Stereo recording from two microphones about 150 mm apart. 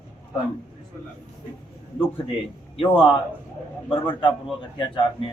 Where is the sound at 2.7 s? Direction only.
35° left (ahead or behind).